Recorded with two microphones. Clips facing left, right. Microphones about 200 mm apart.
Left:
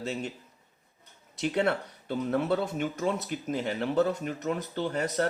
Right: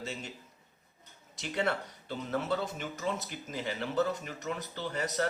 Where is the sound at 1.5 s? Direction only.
55° left (ahead or behind).